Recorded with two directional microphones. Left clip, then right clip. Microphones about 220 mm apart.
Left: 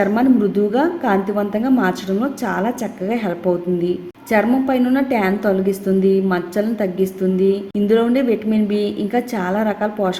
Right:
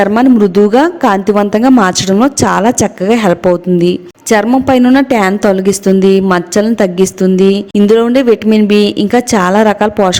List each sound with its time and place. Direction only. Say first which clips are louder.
0.0 s a woman's voice: right 8 dB; 45° right (ahead or behind)